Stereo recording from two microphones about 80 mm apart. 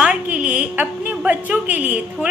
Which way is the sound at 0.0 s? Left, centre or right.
Centre.